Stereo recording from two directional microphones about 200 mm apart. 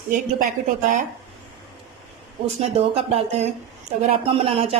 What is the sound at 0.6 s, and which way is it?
Speech, 40° right (ahead or behind).